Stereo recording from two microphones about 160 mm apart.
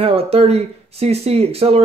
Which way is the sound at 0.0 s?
40° right (ahead or behind).